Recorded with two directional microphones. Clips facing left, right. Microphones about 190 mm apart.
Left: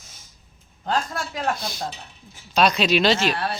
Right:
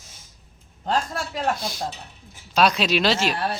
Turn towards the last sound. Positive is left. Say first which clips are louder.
# left 2 dB
turn(degrees=-5)  # may be behind; listen again after turning